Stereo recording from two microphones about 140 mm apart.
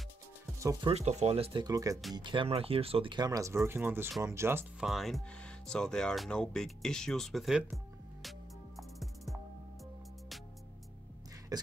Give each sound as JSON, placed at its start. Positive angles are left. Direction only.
{"t": 0.8, "sound": "speech", "side_deg": -50}
{"t": 2.1, "sound": "speech", "side_deg": -35}
{"t": 4.7, "sound": "speech", "side_deg": 0}
{"t": 11.5, "sound": "a sound", "side_deg": -25}